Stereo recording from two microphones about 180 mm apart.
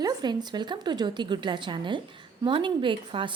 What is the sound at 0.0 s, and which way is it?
A woman's voice, 25° right (ahead or behind).